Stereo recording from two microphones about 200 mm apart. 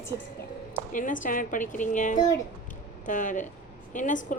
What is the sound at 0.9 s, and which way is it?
A woman's voice, 40° left (ahead or behind).